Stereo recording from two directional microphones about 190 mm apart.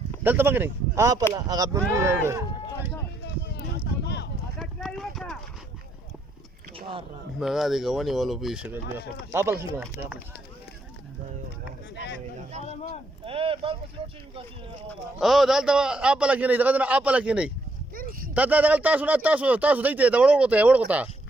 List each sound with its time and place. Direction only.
0.2 s speech: 10° right (ahead or behind)
4.0 s a sound: 65° left (ahead or behind)
4.6 s clip-clop: centre (ahead or behind)
7.3 s a man's voice: centre (ahead or behind)
13.2 s speech: 30° right (ahead or behind)
14.8 s a man's voice: centre (ahead or behind)
17.9 s a sound: 50° right (ahead or behind)
18.3 s speech: 10° right (ahead or behind)